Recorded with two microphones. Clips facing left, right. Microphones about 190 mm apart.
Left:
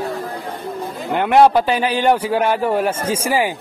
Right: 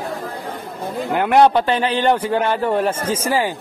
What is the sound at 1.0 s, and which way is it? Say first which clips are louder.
A man's voice: left 1 dB; centre (ahead or behind).